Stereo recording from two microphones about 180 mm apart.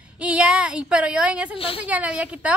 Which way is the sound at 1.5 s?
30° left (ahead or behind).